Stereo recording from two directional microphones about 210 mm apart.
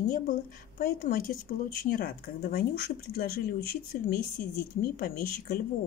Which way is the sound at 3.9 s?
40° left (ahead or behind).